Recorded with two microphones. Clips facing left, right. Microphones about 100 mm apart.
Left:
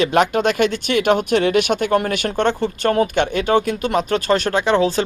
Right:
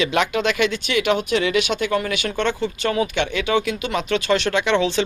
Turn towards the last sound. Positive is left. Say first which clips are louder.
# left 2 dB
turn(degrees=40)  # may be behind; listen again after turning